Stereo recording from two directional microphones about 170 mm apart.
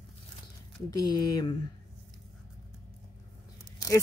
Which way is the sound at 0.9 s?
25° left (ahead or behind).